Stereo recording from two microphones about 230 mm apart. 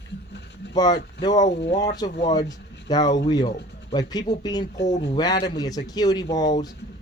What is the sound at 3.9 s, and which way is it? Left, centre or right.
Speech, centre.